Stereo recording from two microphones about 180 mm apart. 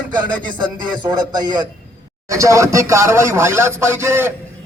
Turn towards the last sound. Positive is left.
turn(degrees=-15)  # may be behind; listen again after turning